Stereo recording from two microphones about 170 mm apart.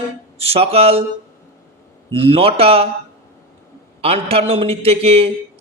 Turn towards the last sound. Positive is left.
turn(degrees=-35)  # may be behind; listen again after turning